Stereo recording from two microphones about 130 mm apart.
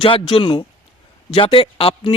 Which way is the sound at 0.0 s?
40° left (ahead or behind).